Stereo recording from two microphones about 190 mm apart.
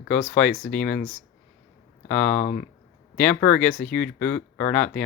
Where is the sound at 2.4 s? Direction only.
45° left (ahead or behind).